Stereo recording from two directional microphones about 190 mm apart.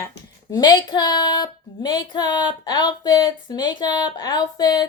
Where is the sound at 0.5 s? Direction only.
20° left (ahead or behind).